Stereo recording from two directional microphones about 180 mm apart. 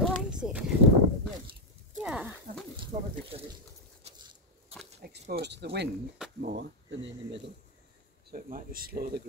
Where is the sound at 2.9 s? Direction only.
45° right (ahead or behind).